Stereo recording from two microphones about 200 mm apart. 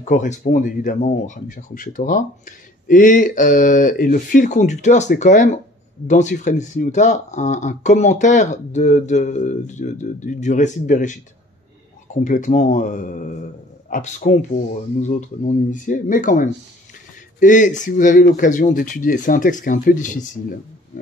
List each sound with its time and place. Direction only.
0.0 s speech: 40° left (ahead or behind)